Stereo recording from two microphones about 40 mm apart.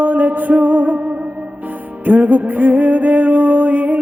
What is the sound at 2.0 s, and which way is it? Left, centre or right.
Music, right.